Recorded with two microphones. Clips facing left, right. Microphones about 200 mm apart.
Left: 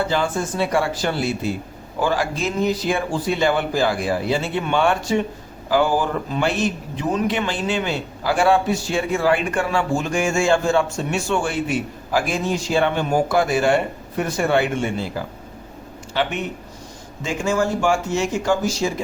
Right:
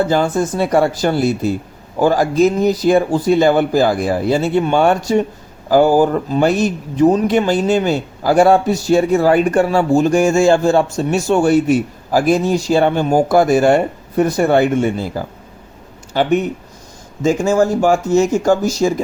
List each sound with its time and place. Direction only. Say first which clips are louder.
0.1 s speech: right 6 dB; 40° right (ahead or behind)